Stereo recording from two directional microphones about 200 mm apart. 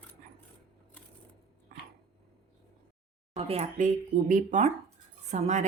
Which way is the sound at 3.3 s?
30° right (ahead or behind).